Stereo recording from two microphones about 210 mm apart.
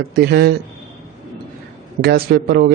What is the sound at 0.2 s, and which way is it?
Speech, 50° right (ahead or behind).